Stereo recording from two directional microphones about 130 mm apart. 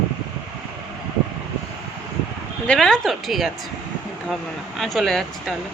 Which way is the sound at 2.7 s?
5° left (ahead or behind).